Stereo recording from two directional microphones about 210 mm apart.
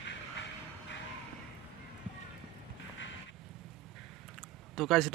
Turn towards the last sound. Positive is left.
turn(degrees=0)  # may be behind; listen again after turning